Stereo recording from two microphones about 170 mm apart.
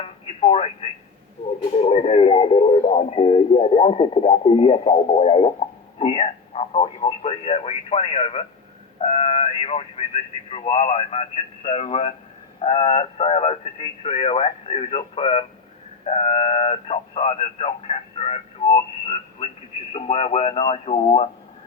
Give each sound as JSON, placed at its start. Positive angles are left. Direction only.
{"t": 0.3, "sound": "speech", "side_deg": 35}